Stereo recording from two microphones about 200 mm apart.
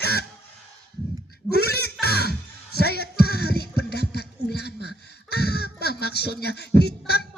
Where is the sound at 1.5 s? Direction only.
50° left (ahead or behind).